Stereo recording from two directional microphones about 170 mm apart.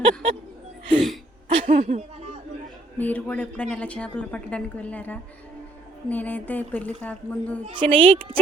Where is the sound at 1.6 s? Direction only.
50° right (ahead or behind).